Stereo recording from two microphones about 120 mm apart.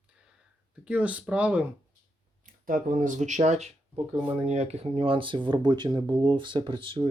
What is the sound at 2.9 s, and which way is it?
Speech, 90° right.